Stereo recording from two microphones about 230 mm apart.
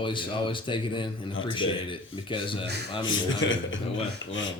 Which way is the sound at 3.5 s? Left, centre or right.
Left.